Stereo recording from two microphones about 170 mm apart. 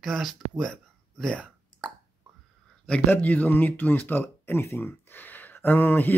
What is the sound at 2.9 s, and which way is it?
Speech, 10° left (ahead or behind).